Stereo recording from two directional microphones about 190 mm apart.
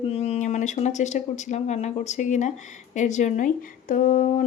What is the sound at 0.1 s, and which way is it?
Speech, 35° left (ahead or behind).